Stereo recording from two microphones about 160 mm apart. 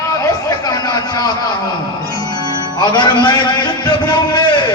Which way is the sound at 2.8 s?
30° left (ahead or behind).